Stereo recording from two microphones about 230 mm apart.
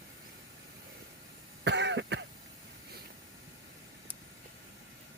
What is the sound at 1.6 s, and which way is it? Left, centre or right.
Cough, right.